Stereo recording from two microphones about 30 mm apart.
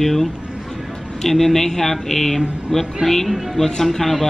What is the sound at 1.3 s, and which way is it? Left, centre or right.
Speech, centre.